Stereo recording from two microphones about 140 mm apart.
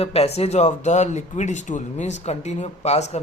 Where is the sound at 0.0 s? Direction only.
45° left (ahead or behind).